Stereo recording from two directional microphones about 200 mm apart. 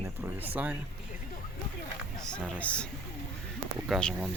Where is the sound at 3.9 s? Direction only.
Centre (ahead or behind).